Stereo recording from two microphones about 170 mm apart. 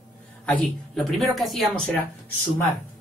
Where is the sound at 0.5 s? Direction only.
Centre (ahead or behind).